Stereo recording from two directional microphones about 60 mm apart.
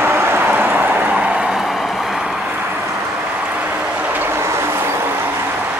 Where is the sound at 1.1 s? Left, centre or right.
Centre.